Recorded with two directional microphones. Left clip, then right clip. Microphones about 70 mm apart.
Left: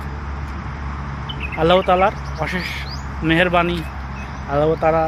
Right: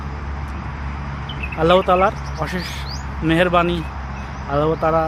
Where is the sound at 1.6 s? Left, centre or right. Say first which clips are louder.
Even; right.